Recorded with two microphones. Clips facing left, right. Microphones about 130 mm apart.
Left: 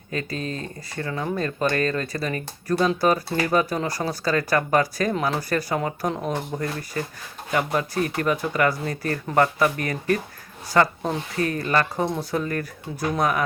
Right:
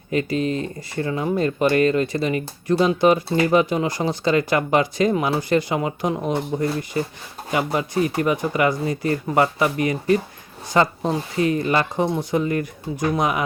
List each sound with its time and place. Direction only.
0.1 s speech: 20° right (ahead or behind)